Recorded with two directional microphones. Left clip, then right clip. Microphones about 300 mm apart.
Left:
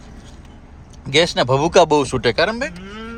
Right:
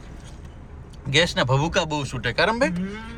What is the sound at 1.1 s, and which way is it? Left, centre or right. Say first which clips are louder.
Speech: left 5 dB; centre.